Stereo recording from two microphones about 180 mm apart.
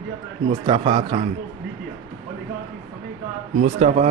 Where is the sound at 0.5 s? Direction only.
25° right (ahead or behind).